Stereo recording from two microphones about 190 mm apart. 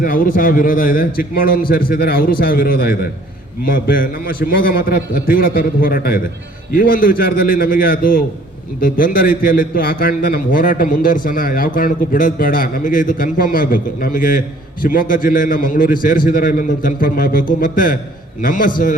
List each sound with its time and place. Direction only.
0.0 s a man's voice: 45° left (ahead or behind)